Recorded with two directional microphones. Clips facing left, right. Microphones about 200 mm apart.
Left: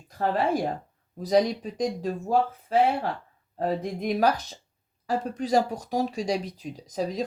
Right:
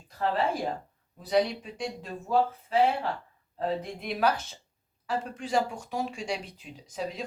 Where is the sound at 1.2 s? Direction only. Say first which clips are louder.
Left 4 dB; 40° left (ahead or behind).